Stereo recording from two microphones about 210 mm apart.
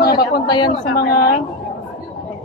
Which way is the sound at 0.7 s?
50° left (ahead or behind).